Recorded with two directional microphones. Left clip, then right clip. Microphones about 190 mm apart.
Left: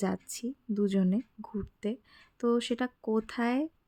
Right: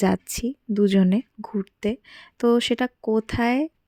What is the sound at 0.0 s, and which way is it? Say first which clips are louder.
Speech: right 11 dB; 40° right (ahead or behind).